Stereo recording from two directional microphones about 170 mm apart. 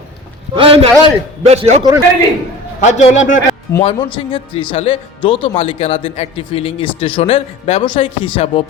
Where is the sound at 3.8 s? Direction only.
30° left (ahead or behind).